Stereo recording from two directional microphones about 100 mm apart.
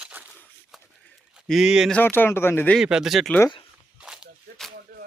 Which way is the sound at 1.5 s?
5° right (ahead or behind).